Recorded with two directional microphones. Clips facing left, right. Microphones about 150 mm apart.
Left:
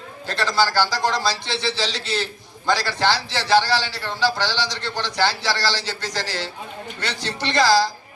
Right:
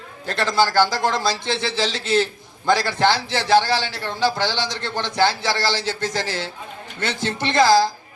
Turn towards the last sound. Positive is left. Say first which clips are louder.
# right 2 dB
turn(degrees=-50)  # may be behind; listen again after turning